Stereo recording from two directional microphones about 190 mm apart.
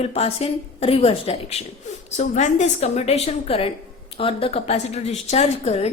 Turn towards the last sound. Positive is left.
turn(degrees=35)  # may be behind; listen again after turning